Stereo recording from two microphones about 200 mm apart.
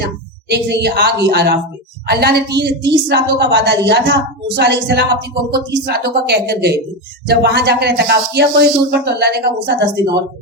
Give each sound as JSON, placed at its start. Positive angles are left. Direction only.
{"t": 0.0, "sound": "speech", "side_deg": -55}